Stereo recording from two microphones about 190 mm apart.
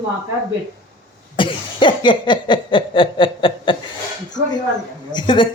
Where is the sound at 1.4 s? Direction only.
25° left (ahead or behind).